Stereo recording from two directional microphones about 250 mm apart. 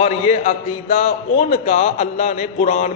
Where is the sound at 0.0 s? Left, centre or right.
Left.